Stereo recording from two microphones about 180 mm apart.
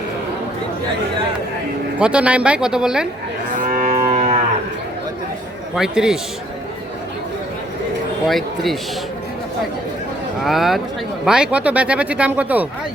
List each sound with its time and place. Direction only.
2.0 s speech: 5° right (ahead or behind)
3.6 s livestock: 45° right (ahead or behind)
5.7 s speech: 5° right (ahead or behind)
8.3 s speech: centre (ahead or behind)
10.4 s speech: centre (ahead or behind)